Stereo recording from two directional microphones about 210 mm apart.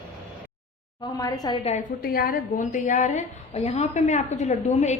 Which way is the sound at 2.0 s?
45° left (ahead or behind).